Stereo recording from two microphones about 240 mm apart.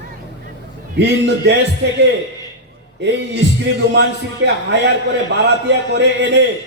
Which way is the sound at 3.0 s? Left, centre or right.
Right.